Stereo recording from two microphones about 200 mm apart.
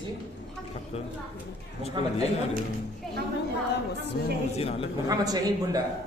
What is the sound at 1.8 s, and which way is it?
Speech, 30° left (ahead or behind).